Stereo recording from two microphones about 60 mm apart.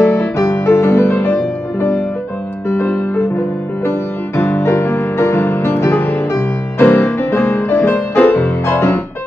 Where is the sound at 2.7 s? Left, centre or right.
Left.